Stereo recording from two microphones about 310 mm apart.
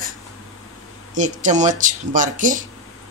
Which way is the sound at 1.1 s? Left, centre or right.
Right.